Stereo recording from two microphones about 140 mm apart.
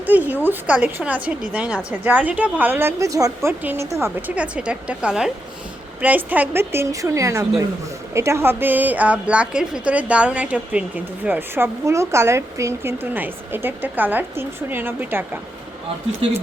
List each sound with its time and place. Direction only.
0.0 s a woman's voice: 10° right (ahead or behind)
4.4 s a woman's voice: 10° right (ahead or behind)